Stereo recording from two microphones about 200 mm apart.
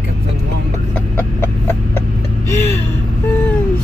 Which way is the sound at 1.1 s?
10° left (ahead or behind).